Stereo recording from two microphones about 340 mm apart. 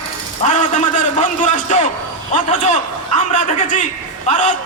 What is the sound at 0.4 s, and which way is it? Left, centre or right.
A man's voice, left.